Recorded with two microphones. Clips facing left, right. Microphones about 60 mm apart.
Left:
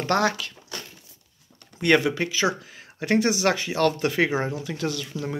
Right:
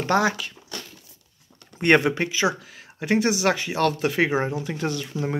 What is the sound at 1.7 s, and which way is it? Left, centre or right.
Speech, right.